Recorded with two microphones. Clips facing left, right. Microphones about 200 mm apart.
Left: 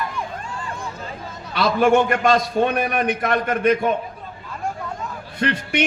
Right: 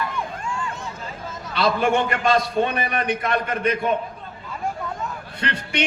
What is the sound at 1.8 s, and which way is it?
A man's voice, 55° left (ahead or behind).